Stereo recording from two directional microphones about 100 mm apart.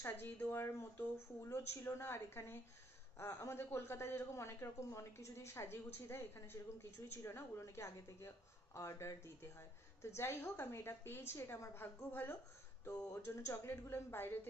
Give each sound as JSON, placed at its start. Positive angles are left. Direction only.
{"t": 0.0, "sound": "a woman's voice", "side_deg": 20}